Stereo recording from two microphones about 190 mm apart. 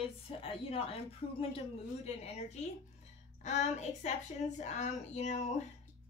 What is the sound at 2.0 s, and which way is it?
A woman's voice, 35° left (ahead or behind).